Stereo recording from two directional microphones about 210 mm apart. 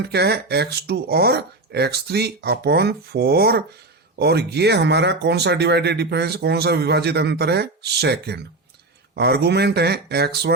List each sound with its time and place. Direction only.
0.1 s speech: 50° right (ahead or behind)